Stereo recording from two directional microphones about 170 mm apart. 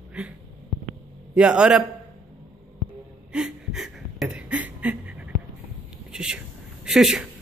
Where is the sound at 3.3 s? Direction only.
5° right (ahead or behind).